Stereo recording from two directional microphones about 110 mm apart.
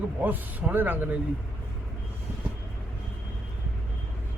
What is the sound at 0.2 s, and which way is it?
Speech, 15° right (ahead or behind).